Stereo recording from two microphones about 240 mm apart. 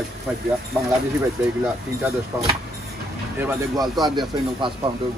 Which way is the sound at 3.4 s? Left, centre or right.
Centre.